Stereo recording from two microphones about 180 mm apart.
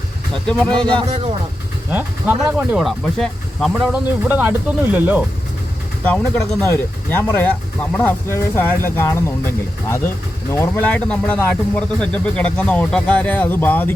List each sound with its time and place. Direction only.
0.8 s speech: 30° right (ahead or behind)
1.9 s speech: 10° right (ahead or behind)
6.1 s speech: 5° left (ahead or behind)
10.5 s speech: 10° left (ahead or behind)